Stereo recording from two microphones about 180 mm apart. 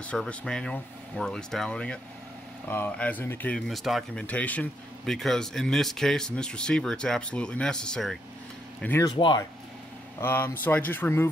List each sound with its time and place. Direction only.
0.0 s speech: 5° left (ahead or behind)
9.1 s speech: 25° left (ahead or behind)
10.2 s speech: 10° left (ahead or behind)